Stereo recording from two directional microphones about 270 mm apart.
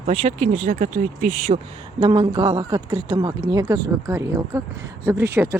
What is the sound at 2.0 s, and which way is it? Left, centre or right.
Speech, centre.